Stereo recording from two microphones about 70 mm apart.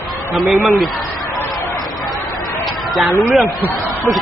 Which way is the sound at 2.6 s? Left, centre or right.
Centre.